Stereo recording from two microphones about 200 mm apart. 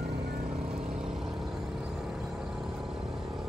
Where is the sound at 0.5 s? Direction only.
5° right (ahead or behind).